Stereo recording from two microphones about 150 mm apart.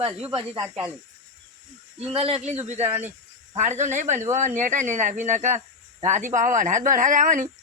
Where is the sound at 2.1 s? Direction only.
40° right (ahead or behind).